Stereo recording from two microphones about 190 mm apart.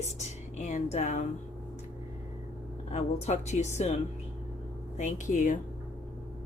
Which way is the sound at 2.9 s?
35° left (ahead or behind).